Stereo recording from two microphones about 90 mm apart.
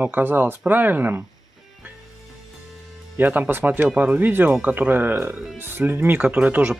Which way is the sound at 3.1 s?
20° right (ahead or behind).